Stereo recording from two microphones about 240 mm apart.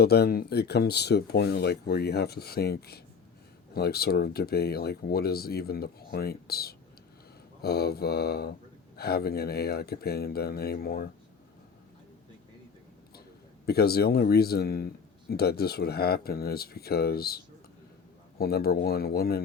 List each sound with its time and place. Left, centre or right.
0.0 s speech: left
13.7 s speech: left